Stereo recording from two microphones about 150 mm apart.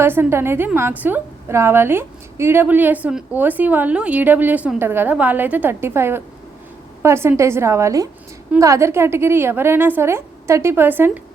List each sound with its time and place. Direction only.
0.0 s a woman's voice: 15° right (ahead or behind)